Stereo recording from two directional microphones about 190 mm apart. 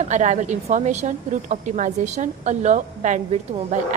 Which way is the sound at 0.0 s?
40° right (ahead or behind).